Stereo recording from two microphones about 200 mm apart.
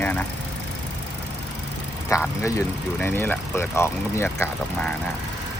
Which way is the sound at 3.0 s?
10° left (ahead or behind).